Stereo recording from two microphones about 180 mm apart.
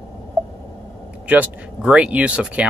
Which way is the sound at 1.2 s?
10° right (ahead or behind).